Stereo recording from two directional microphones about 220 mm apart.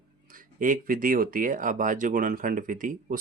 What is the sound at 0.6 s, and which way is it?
Speech, 40° right (ahead or behind).